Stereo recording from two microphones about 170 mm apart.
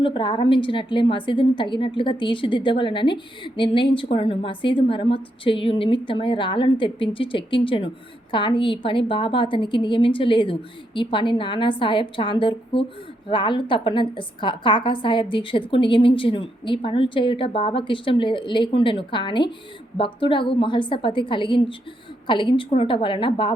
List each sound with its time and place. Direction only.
0.0 s a woman's voice: 30° left (ahead or behind)